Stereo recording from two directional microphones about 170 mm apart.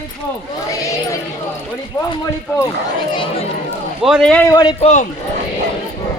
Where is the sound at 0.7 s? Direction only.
20° left (ahead or behind).